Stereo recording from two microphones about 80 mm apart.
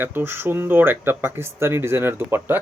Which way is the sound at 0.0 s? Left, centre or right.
Right.